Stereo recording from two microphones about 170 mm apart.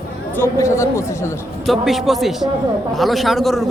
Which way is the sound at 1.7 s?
Centre (ahead or behind).